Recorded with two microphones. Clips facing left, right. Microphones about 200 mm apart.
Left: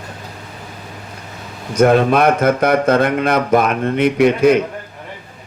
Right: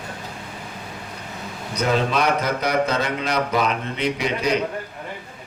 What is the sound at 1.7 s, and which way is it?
A man's voice, 50° left (ahead or behind).